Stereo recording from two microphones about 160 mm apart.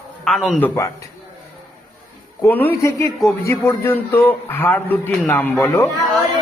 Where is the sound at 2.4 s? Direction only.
10° left (ahead or behind).